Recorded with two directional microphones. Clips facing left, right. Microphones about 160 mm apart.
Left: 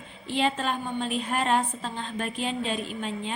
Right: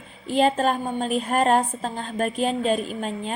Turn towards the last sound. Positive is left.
turn(degrees=-45)  # may be behind; listen again after turning